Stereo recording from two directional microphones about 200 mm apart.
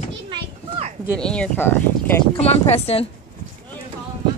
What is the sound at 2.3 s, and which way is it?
Speech, 30° left (ahead or behind).